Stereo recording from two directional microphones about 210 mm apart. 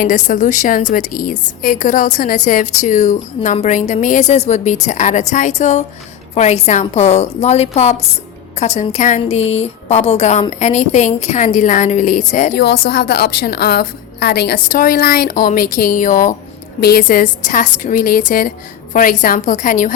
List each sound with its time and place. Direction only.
0.0 s a woman's voice: 35° left (ahead or behind)
12.5 s a woman's voice: 50° left (ahead or behind)